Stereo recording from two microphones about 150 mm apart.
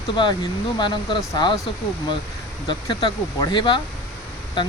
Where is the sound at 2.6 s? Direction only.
35° left (ahead or behind).